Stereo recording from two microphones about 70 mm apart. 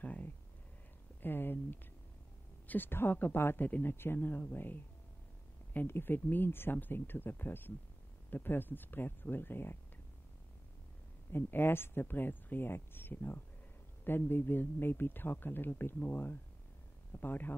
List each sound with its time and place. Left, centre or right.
0.0 s speech: left
11.3 s speech: left